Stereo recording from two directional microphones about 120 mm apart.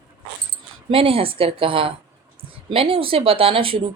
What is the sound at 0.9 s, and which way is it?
Speech, 50° right (ahead or behind).